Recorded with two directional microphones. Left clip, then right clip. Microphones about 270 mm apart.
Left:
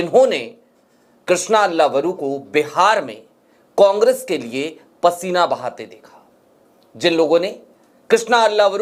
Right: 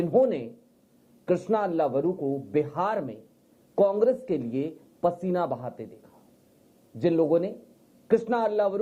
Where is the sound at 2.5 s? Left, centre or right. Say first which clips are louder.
Left 13 dB; centre.